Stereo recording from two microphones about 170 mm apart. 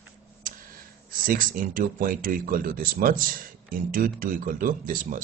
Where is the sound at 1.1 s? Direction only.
55° right (ahead or behind).